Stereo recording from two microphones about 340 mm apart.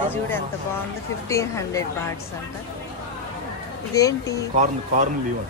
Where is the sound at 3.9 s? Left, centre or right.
Centre.